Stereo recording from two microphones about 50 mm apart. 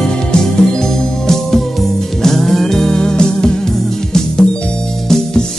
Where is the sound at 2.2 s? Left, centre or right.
Centre.